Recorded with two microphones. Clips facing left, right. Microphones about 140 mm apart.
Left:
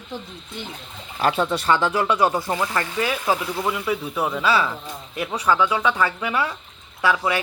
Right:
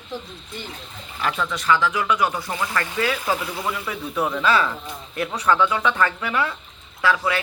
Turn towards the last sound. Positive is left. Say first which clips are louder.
# left 1 dB
turn(degrees=25)  # may be behind; listen again after turning